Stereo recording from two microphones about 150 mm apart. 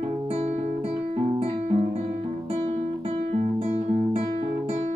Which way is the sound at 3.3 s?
45° right (ahead or behind).